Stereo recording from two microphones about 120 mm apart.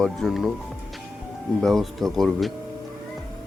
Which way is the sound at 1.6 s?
Centre (ahead or behind).